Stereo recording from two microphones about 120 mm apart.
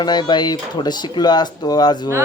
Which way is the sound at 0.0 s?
35° left (ahead or behind).